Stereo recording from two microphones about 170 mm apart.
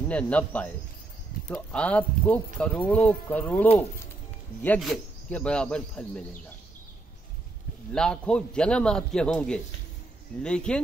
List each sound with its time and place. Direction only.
0.1 s speech: 5° left (ahead or behind)
4.6 s a man's voice: centre (ahead or behind)
7.9 s a man's voice: 5° left (ahead or behind)